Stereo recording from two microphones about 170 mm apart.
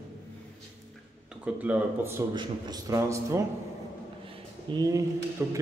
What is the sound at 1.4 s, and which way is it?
Speech, 10° right (ahead or behind).